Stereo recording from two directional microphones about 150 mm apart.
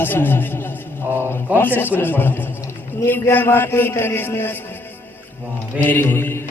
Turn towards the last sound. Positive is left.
turn(degrees=15)  # may be behind; listen again after turning